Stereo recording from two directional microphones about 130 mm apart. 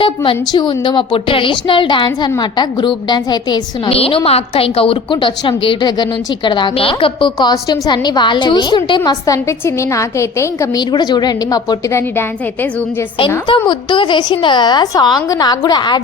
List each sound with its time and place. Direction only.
0.0 s a woman's voice: 40° left (ahead or behind)
3.8 s a woman's voice: 45° left (ahead or behind)
9.0 s a woman's voice: 25° left (ahead or behind)
10.8 s a woman's voice: 35° left (ahead or behind)
11.9 s a woman's voice: 20° left (ahead or behind)
13.7 s a woman's voice: 40° left (ahead or behind)